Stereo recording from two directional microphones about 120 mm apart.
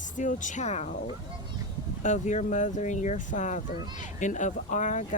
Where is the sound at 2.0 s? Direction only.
80° left.